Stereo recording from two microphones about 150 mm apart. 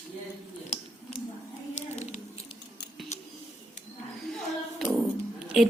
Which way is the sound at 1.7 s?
50° left (ahead or behind).